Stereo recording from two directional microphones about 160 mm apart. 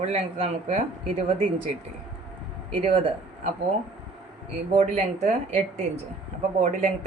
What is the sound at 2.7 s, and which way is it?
Speech, 35° right (ahead or behind).